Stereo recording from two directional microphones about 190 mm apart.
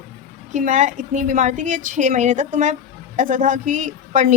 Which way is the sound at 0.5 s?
40° right (ahead or behind).